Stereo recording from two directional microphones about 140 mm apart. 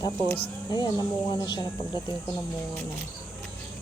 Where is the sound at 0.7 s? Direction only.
30° left (ahead or behind).